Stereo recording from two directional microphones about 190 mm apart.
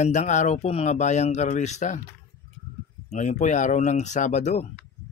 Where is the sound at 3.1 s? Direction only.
40° left (ahead or behind).